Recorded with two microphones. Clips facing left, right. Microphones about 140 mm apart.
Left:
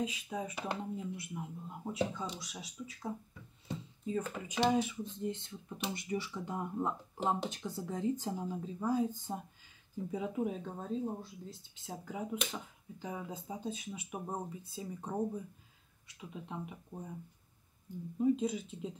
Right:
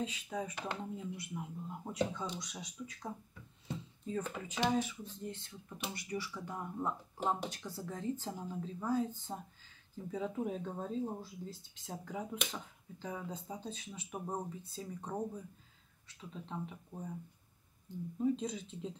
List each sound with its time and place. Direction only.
0.0 s speech: 10° left (ahead or behind)
3.6 s a sound: 5° left (ahead or behind)
4.5 s speech: 15° left (ahead or behind)
18.1 s speech: 10° left (ahead or behind)